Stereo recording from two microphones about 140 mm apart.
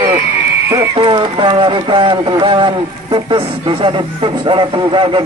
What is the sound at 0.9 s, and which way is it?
Speech, 35° right (ahead or behind).